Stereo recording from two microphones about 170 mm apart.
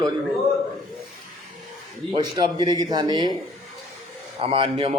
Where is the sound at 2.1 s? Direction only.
25° right (ahead or behind).